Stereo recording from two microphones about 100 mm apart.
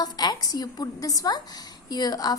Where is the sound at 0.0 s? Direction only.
45° left (ahead or behind).